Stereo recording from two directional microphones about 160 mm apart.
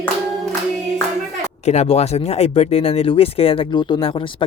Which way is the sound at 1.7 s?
40° left (ahead or behind).